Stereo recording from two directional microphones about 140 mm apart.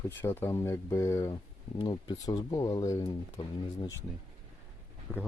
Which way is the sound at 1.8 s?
30° left (ahead or behind).